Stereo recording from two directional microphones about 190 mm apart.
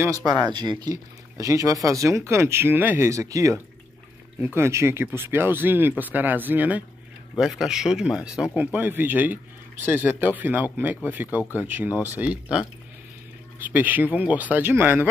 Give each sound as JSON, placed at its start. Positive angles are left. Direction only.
{"t": 0.0, "sound": "speech", "side_deg": -20}